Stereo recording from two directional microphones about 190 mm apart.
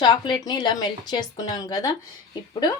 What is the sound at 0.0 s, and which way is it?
Speech, 25° left (ahead or behind).